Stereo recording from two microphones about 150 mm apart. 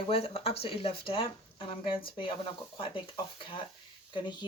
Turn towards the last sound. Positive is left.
turn(degrees=30)  # may be behind; listen again after turning